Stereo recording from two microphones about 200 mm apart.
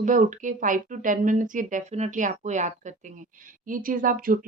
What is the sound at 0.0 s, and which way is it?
Speech, 40° right (ahead or behind).